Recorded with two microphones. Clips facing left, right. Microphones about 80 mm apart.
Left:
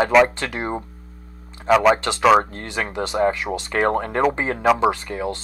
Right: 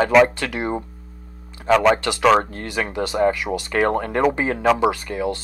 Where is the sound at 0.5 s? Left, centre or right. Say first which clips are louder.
Right 2 dB; left.